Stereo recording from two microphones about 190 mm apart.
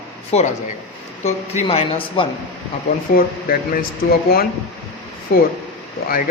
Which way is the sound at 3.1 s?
50° left (ahead or behind).